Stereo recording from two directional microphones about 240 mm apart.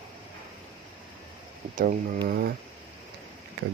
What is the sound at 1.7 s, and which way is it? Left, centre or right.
Speech, right.